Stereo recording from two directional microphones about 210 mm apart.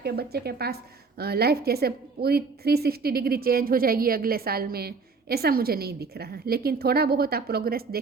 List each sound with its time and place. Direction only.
0.0 s a woman's voice: 50° right (ahead or behind)